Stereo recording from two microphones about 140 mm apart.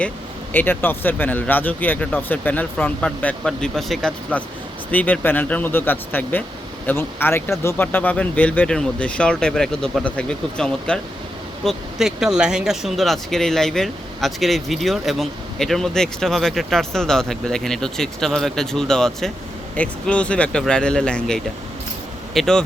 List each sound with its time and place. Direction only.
0.5 s speech: 15° left (ahead or behind)